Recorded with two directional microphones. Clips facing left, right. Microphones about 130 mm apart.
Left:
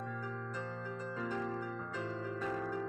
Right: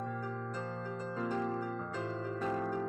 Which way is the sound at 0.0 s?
35° right (ahead or behind).